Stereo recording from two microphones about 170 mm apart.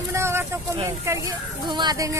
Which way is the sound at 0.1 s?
15° right (ahead or behind).